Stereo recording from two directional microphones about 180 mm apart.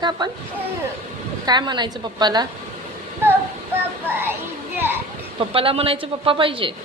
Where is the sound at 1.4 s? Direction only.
25° right (ahead or behind).